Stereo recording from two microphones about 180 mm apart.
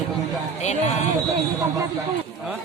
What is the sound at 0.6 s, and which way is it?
Speech, 40° left (ahead or behind).